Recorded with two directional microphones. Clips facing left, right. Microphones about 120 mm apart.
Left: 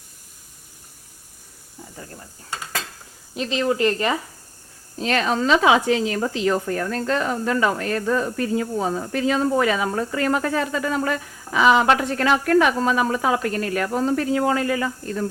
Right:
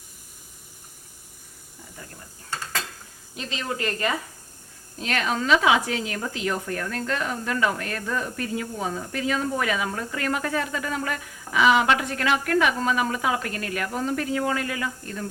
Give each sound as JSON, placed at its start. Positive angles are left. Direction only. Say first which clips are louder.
{"t": 3.3, "sound": "speech", "louder": "left 9 dB", "side_deg": 25}